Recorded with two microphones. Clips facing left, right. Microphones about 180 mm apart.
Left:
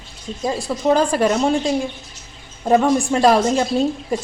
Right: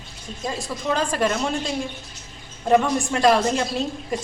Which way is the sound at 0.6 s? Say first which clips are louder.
Left 8 dB; 35° left (ahead or behind).